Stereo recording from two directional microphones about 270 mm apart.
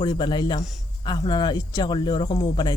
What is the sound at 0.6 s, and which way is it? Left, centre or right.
Speech, centre.